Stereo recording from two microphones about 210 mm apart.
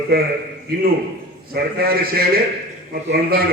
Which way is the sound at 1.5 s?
45° right (ahead or behind).